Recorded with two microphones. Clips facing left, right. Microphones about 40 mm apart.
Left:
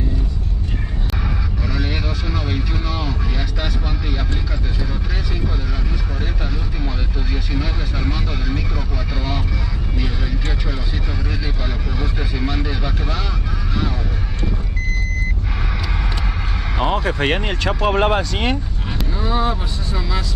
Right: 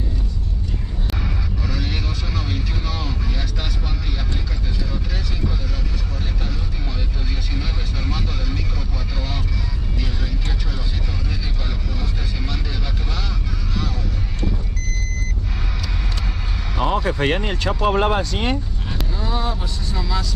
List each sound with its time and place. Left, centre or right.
1.2 s vehicle: centre
7.5 s vehicle: centre
12.0 s vehicle: centre
16.8 s vehicle: left
19.1 s vehicle: left